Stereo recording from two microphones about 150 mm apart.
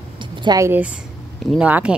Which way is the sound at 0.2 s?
30° right (ahead or behind).